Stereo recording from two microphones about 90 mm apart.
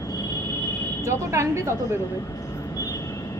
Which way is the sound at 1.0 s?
30° right (ahead or behind).